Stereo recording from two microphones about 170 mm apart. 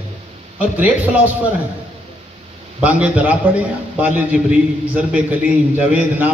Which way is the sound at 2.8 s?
10° right (ahead or behind).